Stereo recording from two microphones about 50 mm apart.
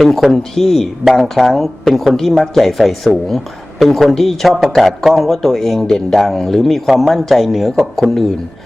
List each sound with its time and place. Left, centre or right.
0.0 s a man's voice: centre